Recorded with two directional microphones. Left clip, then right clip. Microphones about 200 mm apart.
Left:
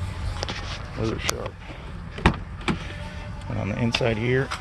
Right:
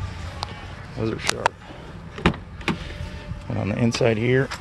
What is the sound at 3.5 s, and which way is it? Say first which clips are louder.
Speech: right 2 dB; 35° right (ahead or behind).